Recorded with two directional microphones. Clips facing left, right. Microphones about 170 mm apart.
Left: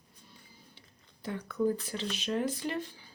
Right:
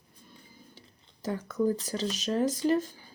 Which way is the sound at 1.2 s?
40° right (ahead or behind).